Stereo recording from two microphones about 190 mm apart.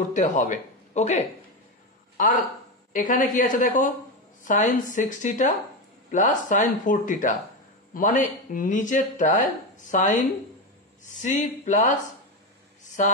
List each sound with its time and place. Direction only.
0.1 s speech: 40° left (ahead or behind)